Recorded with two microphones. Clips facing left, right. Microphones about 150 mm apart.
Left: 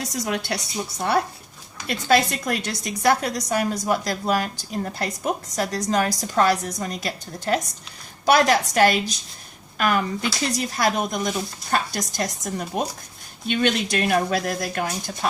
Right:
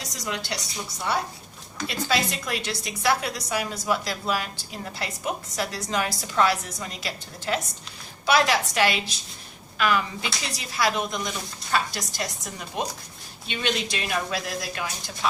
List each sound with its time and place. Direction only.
0.1 s a woman's voice: 55° left (ahead or behind)